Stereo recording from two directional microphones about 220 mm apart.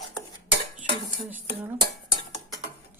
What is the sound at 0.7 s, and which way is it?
Cutlery, 35° right (ahead or behind).